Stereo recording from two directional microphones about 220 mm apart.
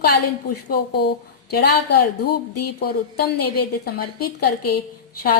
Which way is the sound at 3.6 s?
45° left (ahead or behind).